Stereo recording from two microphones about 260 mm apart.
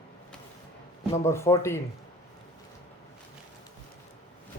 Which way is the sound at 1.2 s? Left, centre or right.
Centre.